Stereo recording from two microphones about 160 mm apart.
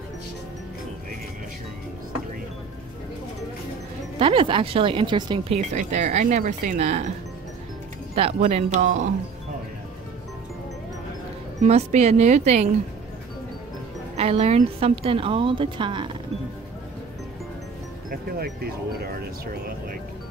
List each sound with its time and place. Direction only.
4.2 s a woman's voice: 35° right (ahead or behind)
5.5 s speech: 45° right (ahead or behind)
8.1 s speech: 40° right (ahead or behind)
11.6 s speech: 45° right (ahead or behind)
14.1 s a woman's voice: 40° right (ahead or behind)
18.1 s speech: 75° right (ahead or behind)